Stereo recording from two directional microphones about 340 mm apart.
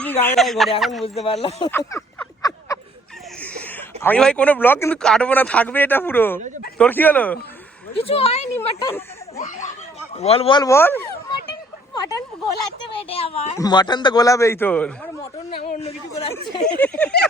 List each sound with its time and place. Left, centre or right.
0.0 s a man's voice: centre
1.0 s a man's voice: centre
1.7 s a sound: centre
3.4 s a man's voice: centre
7.9 s a man's voice: centre
8.5 s a man's voice: centre
9.4 s a child's voice: left; by 15.1 s centre
15.2 s a man's voice: centre
16.6 s speech: centre